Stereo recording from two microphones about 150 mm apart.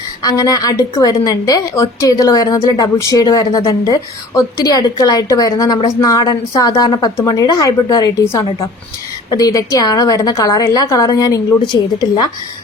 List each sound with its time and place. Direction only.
0.2 s a woman's voice: 25° left (ahead or behind)